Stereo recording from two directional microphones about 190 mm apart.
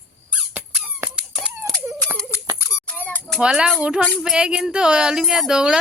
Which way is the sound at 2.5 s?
15° left (ahead or behind).